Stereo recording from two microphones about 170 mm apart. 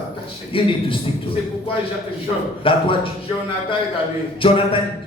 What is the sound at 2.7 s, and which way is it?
Speech, 30° left (ahead or behind).